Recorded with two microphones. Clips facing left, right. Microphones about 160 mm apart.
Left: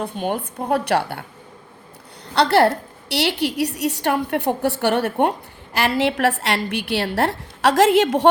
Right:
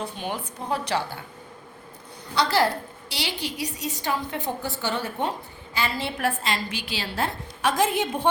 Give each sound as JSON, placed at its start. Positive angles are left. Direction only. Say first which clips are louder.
{"t": 0.0, "sound": "a woman's voice", "louder": "left 7 dB", "side_deg": 55}
{"t": 2.3, "sound": "a woman's voice", "louder": "left 7 dB", "side_deg": 65}